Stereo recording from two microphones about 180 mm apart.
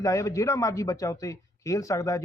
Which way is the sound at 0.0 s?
15° left (ahead or behind).